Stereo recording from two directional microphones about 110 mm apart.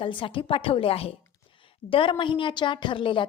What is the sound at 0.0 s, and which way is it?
A woman's voice, 50° left (ahead or behind).